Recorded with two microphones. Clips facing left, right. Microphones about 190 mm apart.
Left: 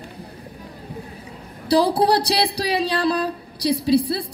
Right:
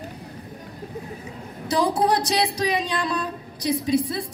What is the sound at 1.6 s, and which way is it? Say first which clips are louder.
A woman's voice: left 4 dB; 35° left (ahead or behind).